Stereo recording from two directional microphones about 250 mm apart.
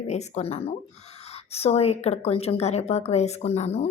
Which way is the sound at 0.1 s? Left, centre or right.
Left.